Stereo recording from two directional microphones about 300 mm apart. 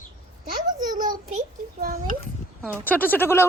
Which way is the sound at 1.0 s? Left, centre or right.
Right.